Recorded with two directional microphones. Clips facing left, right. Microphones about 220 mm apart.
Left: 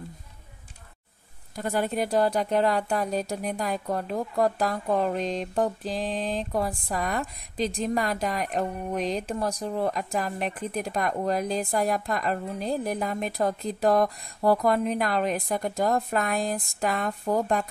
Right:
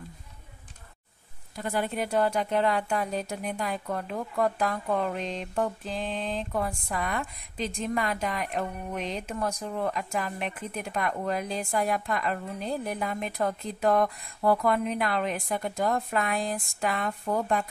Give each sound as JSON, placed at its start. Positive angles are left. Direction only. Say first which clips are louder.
{"t": 1.6, "sound": "a woman's voice", "louder": "left 3 dB", "side_deg": 40}